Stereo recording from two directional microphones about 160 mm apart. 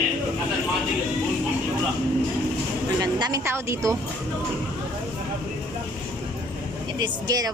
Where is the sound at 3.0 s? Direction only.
25° right (ahead or behind).